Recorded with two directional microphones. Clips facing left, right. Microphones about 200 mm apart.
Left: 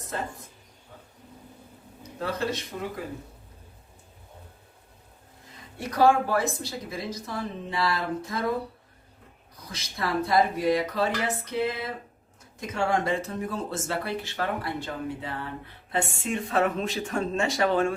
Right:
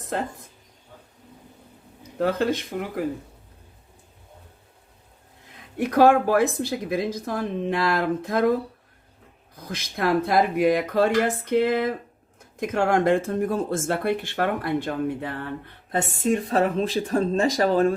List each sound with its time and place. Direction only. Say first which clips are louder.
2.1 s a woman's voice: right 7 dB; 65° right (ahead or behind)
5.8 s a woman's voice: right 5 dB; 60° right (ahead or behind)
9.6 s a woman's voice: right 7 dB; 55° right (ahead or behind)
16.0 s speech: right 6 dB; 40° right (ahead or behind)